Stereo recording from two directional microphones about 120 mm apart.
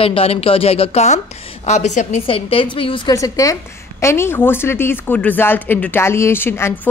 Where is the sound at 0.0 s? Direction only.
55° left (ahead or behind); by 2.2 s 80° left.